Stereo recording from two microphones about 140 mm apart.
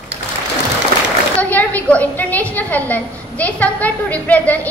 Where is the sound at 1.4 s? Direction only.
10° left (ahead or behind).